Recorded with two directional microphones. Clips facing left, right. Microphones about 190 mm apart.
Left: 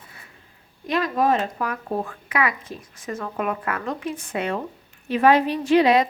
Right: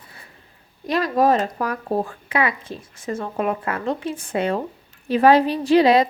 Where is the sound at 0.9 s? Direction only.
35° right (ahead or behind).